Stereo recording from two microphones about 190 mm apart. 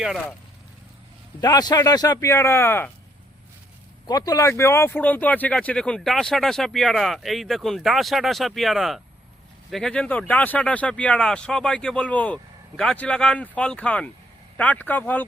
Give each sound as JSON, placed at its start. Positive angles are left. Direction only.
{"t": 0.0, "sound": "speech", "side_deg": 0}
{"t": 1.4, "sound": "speech", "side_deg": 20}
{"t": 4.0, "sound": "speech", "side_deg": 20}